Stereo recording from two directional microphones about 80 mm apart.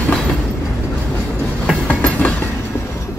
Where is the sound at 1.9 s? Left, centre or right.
Centre.